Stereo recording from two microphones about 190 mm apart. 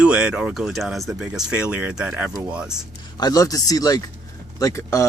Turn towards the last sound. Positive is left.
turn(degrees=15)  # may be behind; listen again after turning